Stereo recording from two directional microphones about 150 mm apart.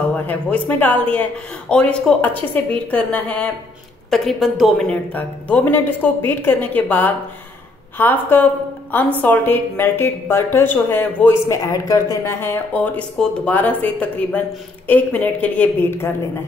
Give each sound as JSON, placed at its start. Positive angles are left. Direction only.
{"t": 0.1, "sound": "a woman's voice", "side_deg": 10}